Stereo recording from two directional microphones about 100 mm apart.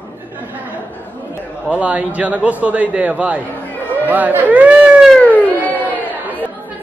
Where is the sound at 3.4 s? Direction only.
20° left (ahead or behind).